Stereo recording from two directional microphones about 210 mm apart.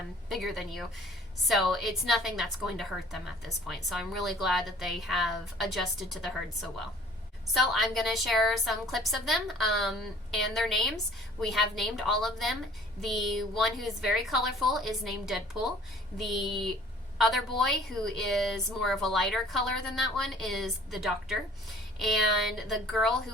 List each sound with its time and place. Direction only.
0.3 s a woman's voice: centre (ahead or behind)